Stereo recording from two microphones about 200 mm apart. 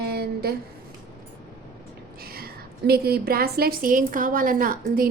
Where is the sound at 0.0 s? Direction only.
55° right (ahead or behind).